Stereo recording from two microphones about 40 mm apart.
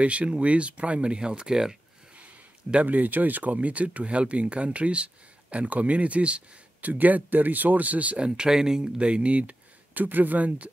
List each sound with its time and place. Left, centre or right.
0.0 s speech: right
1.5 s speech: centre
2.8 s speech: right
6.8 s speech: right
8.2 s speech: right